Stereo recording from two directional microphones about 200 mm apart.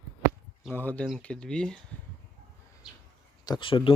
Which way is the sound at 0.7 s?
5° left (ahead or behind).